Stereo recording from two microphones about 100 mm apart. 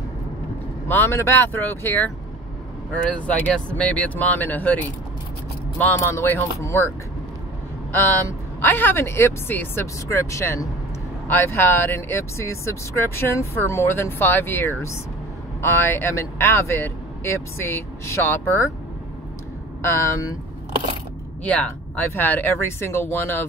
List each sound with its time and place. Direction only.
0.8 s speech: 25° left (ahead or behind)
3.3 s speech: 15° left (ahead or behind)
5.9 s speech: 25° left (ahead or behind)
7.9 s speech: 20° left (ahead or behind)
19.9 s speech: 35° left (ahead or behind)
21.5 s speech: 10° left (ahead or behind)